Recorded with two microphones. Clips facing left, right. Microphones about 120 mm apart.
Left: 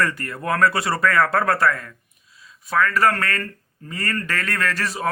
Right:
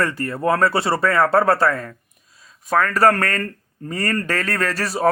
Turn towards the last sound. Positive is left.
turn(degrees=-35)  # may be behind; listen again after turning